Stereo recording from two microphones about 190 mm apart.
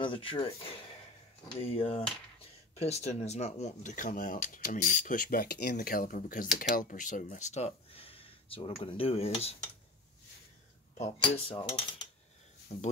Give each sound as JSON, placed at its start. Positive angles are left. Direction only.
{"t": 0.0, "sound": "cutlery", "side_deg": 25}
{"t": 2.7, "sound": "speech", "side_deg": 35}
{"t": 11.0, "sound": "cutlery", "side_deg": 30}
{"t": 12.7, "sound": "speech", "side_deg": 35}